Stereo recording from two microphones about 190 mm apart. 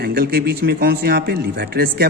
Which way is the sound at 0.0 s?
55° right (ahead or behind).